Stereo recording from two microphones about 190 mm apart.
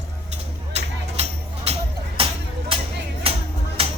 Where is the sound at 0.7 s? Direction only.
35° right (ahead or behind).